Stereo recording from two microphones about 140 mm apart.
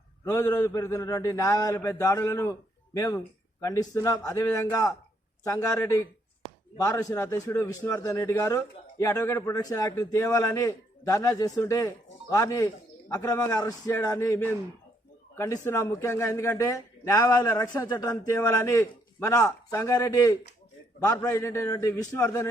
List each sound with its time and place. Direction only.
0.3 s a man's voice: 20° left (ahead or behind)